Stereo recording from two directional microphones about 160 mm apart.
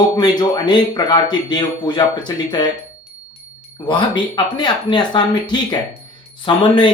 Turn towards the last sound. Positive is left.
turn(degrees=30)  # may be behind; listen again after turning